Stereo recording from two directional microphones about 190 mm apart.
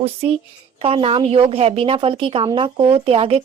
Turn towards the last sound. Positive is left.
turn(degrees=-30)  # may be behind; listen again after turning